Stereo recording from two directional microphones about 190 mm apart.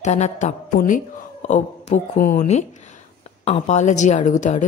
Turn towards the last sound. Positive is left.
turn(degrees=40)  # may be behind; listen again after turning